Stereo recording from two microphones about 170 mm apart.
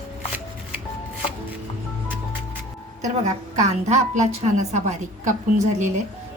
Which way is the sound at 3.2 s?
45° right (ahead or behind).